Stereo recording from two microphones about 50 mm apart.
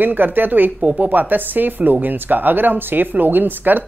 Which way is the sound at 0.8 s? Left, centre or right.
Right.